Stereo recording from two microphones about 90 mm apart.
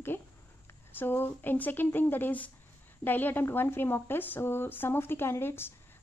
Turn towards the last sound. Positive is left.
turn(degrees=25)  # may be behind; listen again after turning